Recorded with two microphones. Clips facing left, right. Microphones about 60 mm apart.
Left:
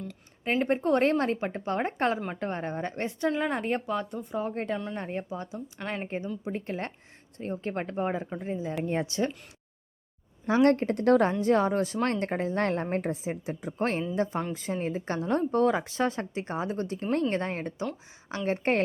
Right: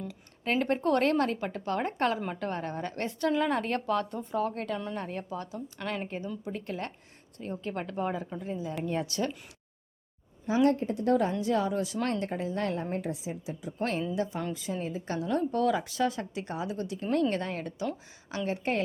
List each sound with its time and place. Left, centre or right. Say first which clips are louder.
0.4 s a woman's voice: left 1 dB; centre
6.1 s a woman's voice: left 3 dB; left
10.4 s a woman's voice: left 3 dB; left